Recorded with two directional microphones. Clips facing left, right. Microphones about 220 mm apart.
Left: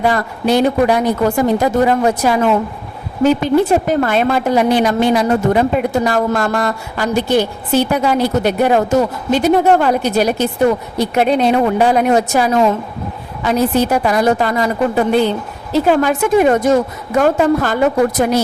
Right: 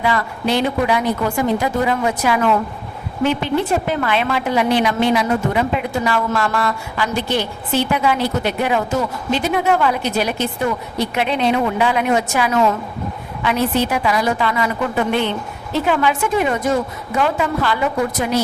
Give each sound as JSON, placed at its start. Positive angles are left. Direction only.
{"t": 0.0, "sound": "a woman's voice", "side_deg": 45}